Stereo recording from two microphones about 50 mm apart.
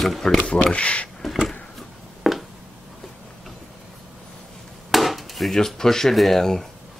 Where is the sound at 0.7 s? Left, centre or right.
Left.